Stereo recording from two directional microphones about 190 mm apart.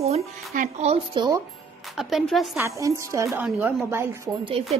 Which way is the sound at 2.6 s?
15° right (ahead or behind).